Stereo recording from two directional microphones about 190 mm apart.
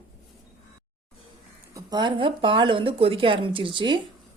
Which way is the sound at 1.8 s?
20° right (ahead or behind).